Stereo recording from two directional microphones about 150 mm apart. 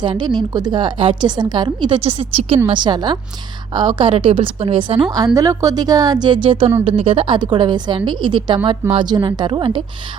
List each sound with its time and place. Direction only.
0.0 s a woman's voice: 30° right (ahead or behind)
2.0 s a woman's voice: 45° right (ahead or behind)
5.1 s a woman's voice: 25° right (ahead or behind)